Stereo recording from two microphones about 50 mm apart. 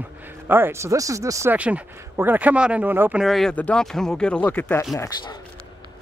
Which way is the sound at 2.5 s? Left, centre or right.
Right.